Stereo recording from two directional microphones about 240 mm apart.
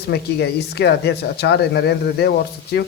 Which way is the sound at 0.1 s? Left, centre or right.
Left.